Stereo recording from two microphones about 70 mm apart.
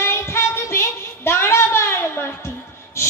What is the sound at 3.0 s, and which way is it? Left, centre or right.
Hiss, left.